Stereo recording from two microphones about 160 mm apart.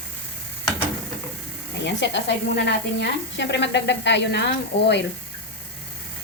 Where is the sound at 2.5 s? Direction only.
90° left.